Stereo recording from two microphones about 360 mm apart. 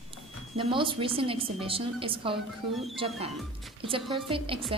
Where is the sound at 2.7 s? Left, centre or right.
Centre.